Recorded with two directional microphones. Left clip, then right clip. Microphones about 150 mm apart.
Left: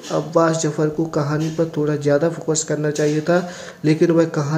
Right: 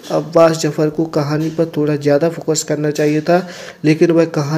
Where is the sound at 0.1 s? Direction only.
15° right (ahead or behind).